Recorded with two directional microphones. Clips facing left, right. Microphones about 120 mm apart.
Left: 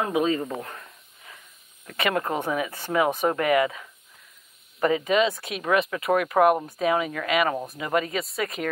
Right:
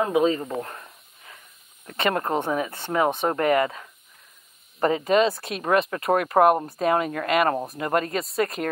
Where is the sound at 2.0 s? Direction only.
35° right (ahead or behind).